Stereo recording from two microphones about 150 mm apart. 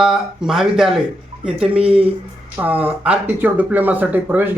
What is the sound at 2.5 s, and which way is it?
Speech, 10° right (ahead or behind).